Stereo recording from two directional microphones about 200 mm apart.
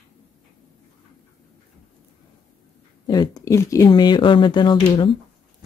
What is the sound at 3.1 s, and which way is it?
Speech, 20° left (ahead or behind).